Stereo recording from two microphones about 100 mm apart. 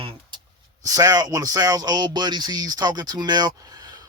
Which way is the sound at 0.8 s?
35° right (ahead or behind).